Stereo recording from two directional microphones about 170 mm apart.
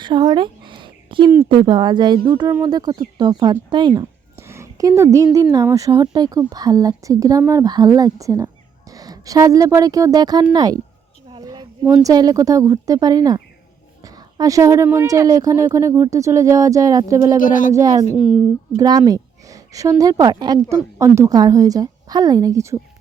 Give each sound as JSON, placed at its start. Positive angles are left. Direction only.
{"t": 0.0, "sound": "a sound", "side_deg": -25}
{"t": 1.5, "sound": "speech", "side_deg": -25}
{"t": 2.3, "sound": "a woman's voice", "side_deg": -15}
{"t": 11.3, "sound": "a sound", "side_deg": -25}
{"t": 12.0, "sound": "speech", "side_deg": -20}
{"t": 17.3, "sound": "speech", "side_deg": 50}
{"t": 18.8, "sound": "speech", "side_deg": -20}